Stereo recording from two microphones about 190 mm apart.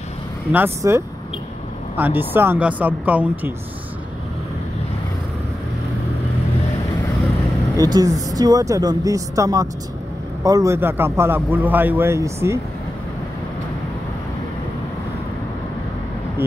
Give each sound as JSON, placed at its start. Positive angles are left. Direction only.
{"t": 0.5, "sound": "a man's voice", "side_deg": -10}
{"t": 7.7, "sound": "a man's voice", "side_deg": -20}